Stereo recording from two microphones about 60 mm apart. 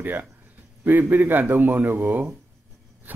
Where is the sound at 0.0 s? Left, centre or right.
Right.